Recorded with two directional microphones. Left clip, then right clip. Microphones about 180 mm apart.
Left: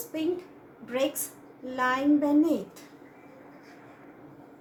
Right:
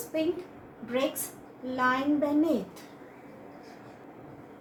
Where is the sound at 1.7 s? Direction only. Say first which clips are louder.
Left 2 dB; 30° left (ahead or behind).